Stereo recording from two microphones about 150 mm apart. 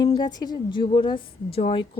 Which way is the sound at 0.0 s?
30° left (ahead or behind).